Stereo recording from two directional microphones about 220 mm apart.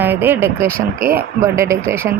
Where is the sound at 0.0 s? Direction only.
10° right (ahead or behind).